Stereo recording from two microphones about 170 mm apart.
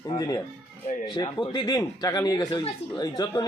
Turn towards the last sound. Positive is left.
turn(degrees=20)  # may be behind; listen again after turning